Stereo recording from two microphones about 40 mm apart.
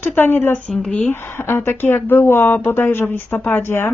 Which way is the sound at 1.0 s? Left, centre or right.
Left.